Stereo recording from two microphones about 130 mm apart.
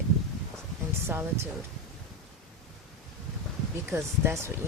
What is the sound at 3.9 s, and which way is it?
Speech, 20° right (ahead or behind).